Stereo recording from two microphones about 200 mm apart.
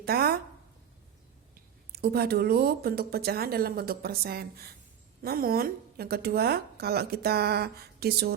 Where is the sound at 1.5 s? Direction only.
50° right (ahead or behind).